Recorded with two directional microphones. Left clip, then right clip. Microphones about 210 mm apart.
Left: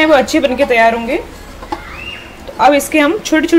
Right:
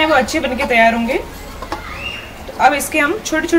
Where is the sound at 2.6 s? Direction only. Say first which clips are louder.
Left 3 dB; 35° left (ahead or behind).